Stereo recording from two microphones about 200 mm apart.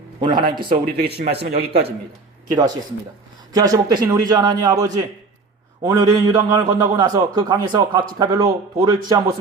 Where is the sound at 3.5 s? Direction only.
20° right (ahead or behind).